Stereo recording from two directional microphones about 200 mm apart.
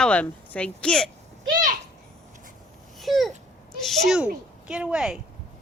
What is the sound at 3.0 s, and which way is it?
Babbling, centre (ahead or behind).